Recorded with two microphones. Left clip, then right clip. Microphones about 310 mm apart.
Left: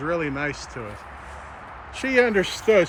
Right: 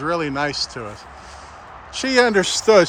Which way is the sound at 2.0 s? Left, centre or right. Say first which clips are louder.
Right 4 dB; centre.